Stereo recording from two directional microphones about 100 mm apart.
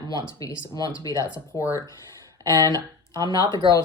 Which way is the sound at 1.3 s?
15° right (ahead or behind).